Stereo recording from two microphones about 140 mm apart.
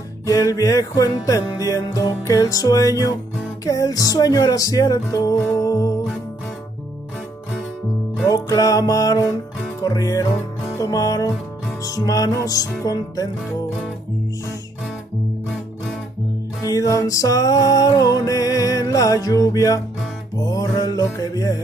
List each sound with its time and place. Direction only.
0.3 s music: 25° left (ahead or behind)
8.3 s music: 25° left (ahead or behind)
16.6 s music: 25° left (ahead or behind)